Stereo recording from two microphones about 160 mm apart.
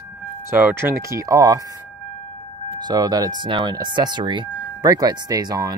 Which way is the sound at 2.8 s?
25° right (ahead or behind).